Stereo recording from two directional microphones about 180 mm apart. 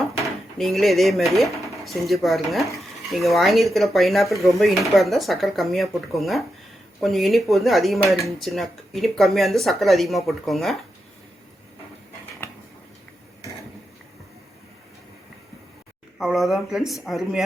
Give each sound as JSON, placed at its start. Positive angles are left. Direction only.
{"t": 0.6, "sound": "speech", "side_deg": 0}
{"t": 16.1, "sound": "speech", "side_deg": 0}